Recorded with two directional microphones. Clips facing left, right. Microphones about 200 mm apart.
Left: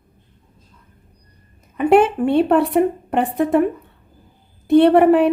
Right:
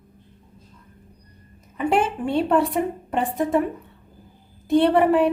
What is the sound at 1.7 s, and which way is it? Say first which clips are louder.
A woman's voice: left 8 dB; 60° left (ahead or behind).